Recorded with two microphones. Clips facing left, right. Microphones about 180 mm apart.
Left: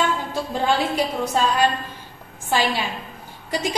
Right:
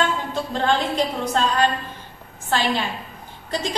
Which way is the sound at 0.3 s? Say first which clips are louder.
Even; 10° left (ahead or behind).